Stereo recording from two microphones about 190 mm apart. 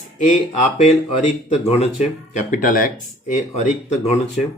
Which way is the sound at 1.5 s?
35° left (ahead or behind).